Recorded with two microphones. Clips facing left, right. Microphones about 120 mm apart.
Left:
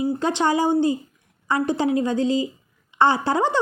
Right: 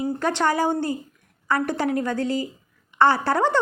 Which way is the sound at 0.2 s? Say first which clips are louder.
Right 1 dB; 15° left (ahead or behind).